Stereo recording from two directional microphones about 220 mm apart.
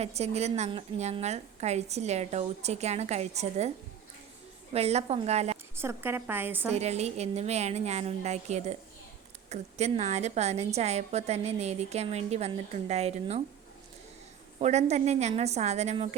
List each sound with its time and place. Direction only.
0.0 s a woman's voice: 30° right (ahead or behind)
4.7 s a woman's voice: 30° right (ahead or behind)
5.8 s a woman's voice: 10° right (ahead or behind)
6.7 s a woman's voice: 30° right (ahead or behind)
14.6 s a woman's voice: 30° right (ahead or behind)